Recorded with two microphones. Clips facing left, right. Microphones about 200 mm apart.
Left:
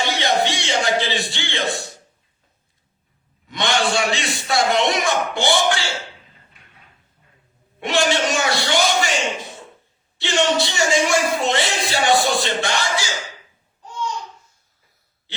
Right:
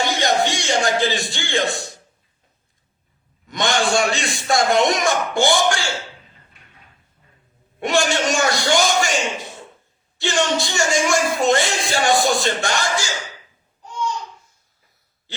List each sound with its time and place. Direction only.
0.0 s music: 45° right (ahead or behind)
3.5 s speech: 45° right (ahead or behind)
7.8 s speech: 45° right (ahead or behind)